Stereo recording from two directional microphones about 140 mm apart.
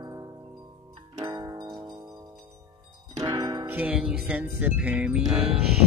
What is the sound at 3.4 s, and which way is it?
Music, 35° right (ahead or behind).